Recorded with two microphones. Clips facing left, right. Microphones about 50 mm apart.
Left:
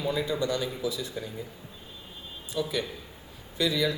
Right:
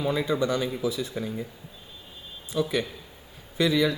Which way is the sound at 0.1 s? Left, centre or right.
Right.